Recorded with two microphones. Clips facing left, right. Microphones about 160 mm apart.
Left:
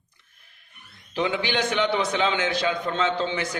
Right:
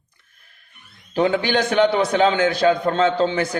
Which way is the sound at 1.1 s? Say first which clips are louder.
Right 6 dB; 40° right (ahead or behind).